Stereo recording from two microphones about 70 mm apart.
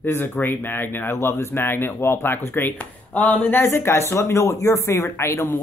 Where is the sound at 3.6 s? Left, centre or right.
Left.